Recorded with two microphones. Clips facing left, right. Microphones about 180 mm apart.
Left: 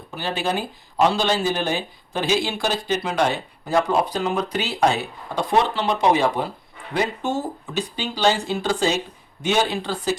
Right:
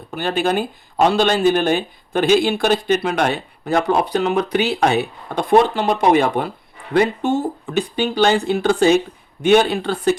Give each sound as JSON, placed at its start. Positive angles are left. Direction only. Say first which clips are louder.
{"t": 0.2, "sound": "speech", "louder": "right 5 dB", "side_deg": -55}